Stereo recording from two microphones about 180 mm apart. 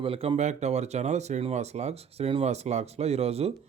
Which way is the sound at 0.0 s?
30° right (ahead or behind).